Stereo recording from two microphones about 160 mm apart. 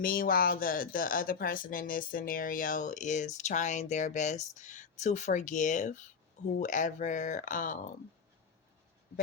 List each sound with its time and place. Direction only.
0.0 s speech: 65° left (ahead or behind)